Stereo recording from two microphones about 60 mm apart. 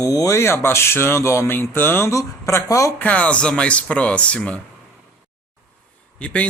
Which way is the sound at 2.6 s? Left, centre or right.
Left.